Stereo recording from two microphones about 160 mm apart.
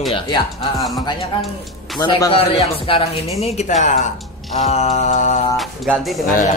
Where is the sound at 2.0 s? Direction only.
25° left (ahead or behind).